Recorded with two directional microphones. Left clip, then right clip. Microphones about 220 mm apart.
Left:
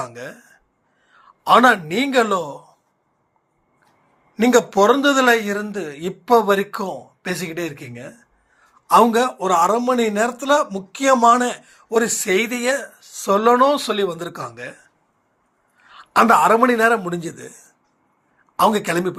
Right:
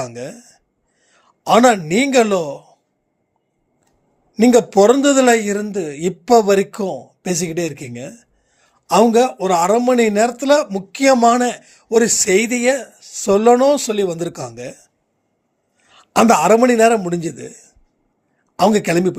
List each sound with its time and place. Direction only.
0.1 s a man's voice: 55° right (ahead or behind)
4.4 s speech: 55° right (ahead or behind)
15.8 s a man's voice: 55° right (ahead or behind)